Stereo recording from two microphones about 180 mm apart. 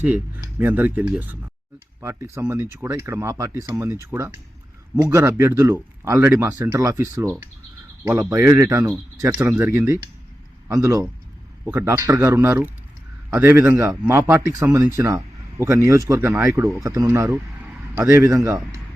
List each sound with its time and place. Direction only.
0.0 s speech: 10° right (ahead or behind)